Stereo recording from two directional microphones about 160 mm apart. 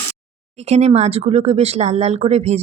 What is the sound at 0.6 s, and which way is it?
Speech, 40° right (ahead or behind).